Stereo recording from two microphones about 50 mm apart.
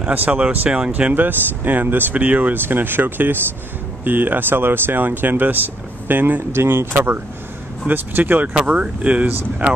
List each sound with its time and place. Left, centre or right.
0.1 s speech: right
0.7 s speech: right
1.1 s speech: right
2.1 s speech: right
6.5 s speech: right
7.9 s speech: right
8.5 s speech: right